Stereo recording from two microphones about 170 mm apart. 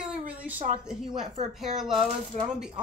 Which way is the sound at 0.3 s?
10° right (ahead or behind).